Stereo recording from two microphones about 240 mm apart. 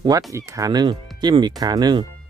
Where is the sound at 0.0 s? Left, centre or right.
Centre.